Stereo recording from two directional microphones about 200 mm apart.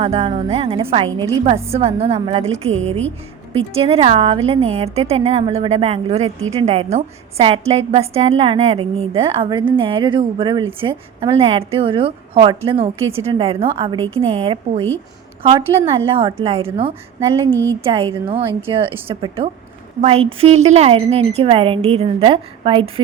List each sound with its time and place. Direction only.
0.0 s a woman's voice: 30° right (ahead or behind)
1.6 s a woman's voice: 30° right (ahead or behind)
16.1 s a woman's voice: 30° right (ahead or behind)
17.2 s a sound: 15° right (ahead or behind)
18.3 s a woman's voice: 25° right (ahead or behind)